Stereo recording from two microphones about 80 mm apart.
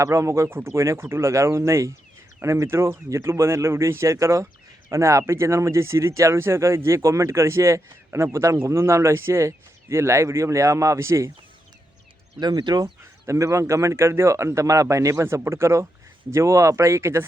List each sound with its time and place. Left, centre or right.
0.0 s speech: right
12.4 s speech: right
13.2 s speech: right